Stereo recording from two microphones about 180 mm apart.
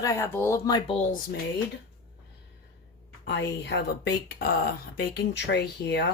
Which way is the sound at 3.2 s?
70° left (ahead or behind).